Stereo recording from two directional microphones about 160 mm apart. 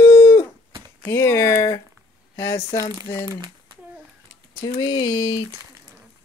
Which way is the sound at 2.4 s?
20° left (ahead or behind).